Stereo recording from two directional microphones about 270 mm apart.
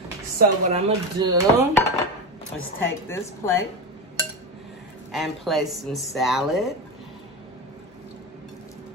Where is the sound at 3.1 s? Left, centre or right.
Centre.